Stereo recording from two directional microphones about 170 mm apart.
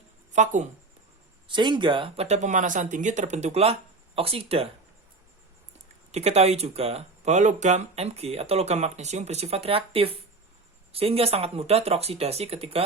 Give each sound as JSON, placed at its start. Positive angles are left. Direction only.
{"t": 0.3, "sound": "speech", "side_deg": -45}
{"t": 1.5, "sound": "speech", "side_deg": -30}
{"t": 6.1, "sound": "speech", "side_deg": -40}